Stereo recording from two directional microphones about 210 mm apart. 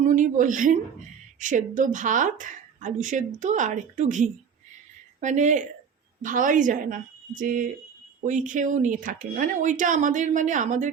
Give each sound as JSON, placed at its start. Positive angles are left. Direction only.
{"t": 0.0, "sound": "speech", "side_deg": -35}